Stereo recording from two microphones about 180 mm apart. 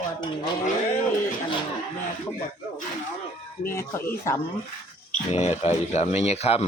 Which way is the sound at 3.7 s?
15° left (ahead or behind).